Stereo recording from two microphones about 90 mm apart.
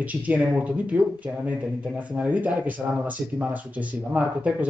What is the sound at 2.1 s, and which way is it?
Speech, 15° right (ahead or behind).